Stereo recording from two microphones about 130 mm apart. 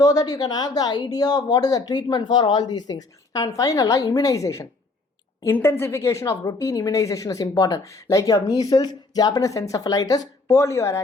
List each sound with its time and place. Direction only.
0.0 s speech: 30° left (ahead or behind)